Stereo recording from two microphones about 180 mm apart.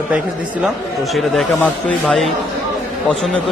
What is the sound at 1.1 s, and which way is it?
A man's voice, centre (ahead or behind).